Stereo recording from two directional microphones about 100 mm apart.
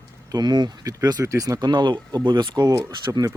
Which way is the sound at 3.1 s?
35° right (ahead or behind).